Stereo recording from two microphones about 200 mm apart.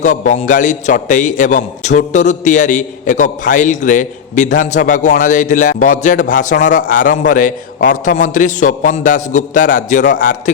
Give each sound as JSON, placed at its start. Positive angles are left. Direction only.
{"t": 0.0, "sound": "a man's voice", "side_deg": 40}